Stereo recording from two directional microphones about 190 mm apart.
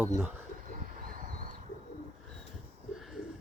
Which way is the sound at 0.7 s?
45° right (ahead or behind).